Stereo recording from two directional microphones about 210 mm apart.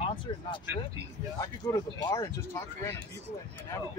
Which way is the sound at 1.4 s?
15° left (ahead or behind).